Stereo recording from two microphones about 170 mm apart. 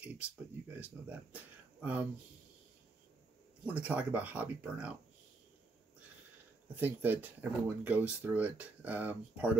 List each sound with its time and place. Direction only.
0.0 s speech: 10° right (ahead or behind)
3.6 s speech: 10° right (ahead or behind)
6.7 s speech: 10° right (ahead or behind)